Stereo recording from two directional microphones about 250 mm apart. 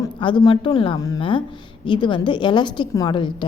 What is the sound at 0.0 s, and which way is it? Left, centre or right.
A woman's voice, centre.